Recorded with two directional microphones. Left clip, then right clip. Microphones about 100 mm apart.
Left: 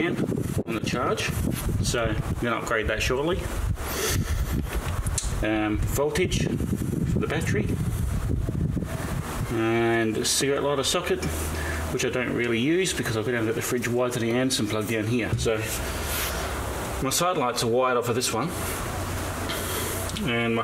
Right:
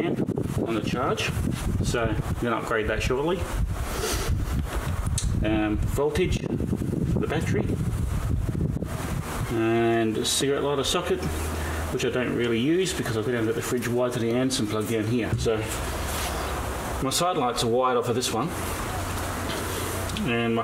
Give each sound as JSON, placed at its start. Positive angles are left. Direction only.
{"t": 0.7, "sound": "speech", "side_deg": 15}
{"t": 5.4, "sound": "speech", "side_deg": 10}
{"t": 9.6, "sound": "speech", "side_deg": 10}
{"t": 12.0, "sound": "speech", "side_deg": 15}
{"t": 17.0, "sound": "speech", "side_deg": 10}
{"t": 20.2, "sound": "speech", "side_deg": 5}